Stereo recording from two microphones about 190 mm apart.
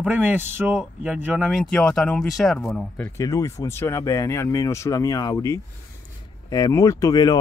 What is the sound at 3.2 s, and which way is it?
Speech, 15° left (ahead or behind).